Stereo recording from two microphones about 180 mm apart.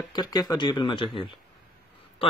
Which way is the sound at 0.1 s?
20° left (ahead or behind).